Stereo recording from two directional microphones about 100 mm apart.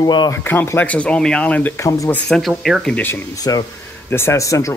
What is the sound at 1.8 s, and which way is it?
Speech, 35° left (ahead or behind).